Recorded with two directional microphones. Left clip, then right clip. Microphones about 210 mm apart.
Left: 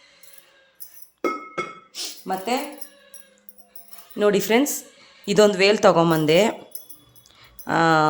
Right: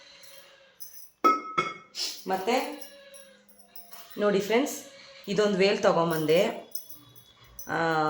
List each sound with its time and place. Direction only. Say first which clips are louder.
1.9 s a sound: left 2 dB; 45° left (ahead or behind)
4.2 s speech: left 6 dB; 50° left (ahead or behind)
7.7 s speech: left 9 dB; 55° left (ahead or behind)